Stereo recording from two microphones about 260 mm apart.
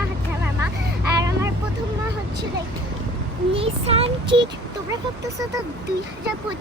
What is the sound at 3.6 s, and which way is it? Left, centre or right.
Child singing, right.